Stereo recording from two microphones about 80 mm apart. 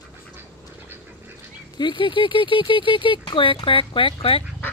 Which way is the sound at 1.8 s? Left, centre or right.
Left.